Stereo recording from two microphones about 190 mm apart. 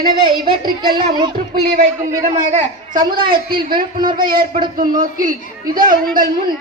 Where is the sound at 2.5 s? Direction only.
50° right (ahead or behind).